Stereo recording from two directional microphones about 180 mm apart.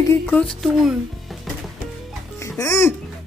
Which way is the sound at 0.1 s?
10° left (ahead or behind).